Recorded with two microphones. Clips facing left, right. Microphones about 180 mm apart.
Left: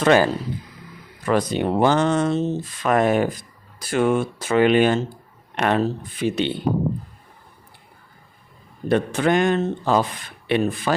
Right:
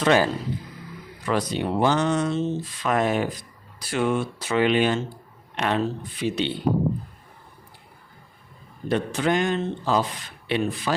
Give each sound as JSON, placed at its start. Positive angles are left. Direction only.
{"t": 0.0, "sound": "speech", "side_deg": 50}
{"t": 8.9, "sound": "speech", "side_deg": 55}